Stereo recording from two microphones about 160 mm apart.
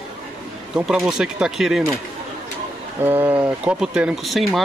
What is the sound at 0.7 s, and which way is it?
Speech, centre (ahead or behind).